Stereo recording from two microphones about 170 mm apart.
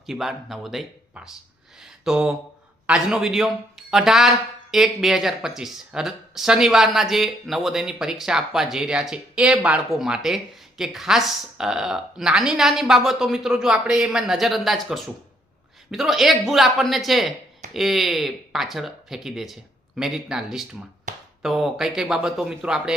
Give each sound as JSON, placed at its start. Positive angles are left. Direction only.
{"t": 0.0, "sound": "speech", "side_deg": 0}
{"t": 21.1, "sound": "a sound", "side_deg": -50}
{"t": 21.4, "sound": "speech", "side_deg": 0}